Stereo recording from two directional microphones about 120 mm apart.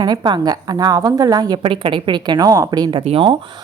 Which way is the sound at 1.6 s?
45° right (ahead or behind).